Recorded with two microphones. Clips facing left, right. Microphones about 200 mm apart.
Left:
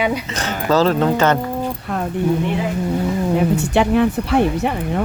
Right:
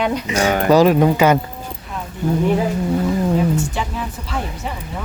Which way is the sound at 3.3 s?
65° left (ahead or behind).